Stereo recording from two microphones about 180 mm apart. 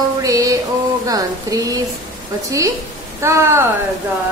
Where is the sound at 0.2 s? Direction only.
20° right (ahead or behind).